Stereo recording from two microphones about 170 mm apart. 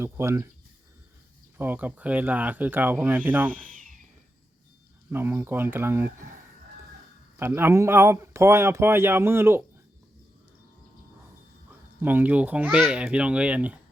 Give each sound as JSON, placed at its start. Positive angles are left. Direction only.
{"t": 0.0, "sound": "speech", "side_deg": -15}
{"t": 1.5, "sound": "speech", "side_deg": -10}
{"t": 3.7, "sound": "a sound", "side_deg": -50}
{"t": 5.1, "sound": "speech", "side_deg": -15}
{"t": 7.3, "sound": "speech", "side_deg": -15}
{"t": 11.9, "sound": "speech", "side_deg": -10}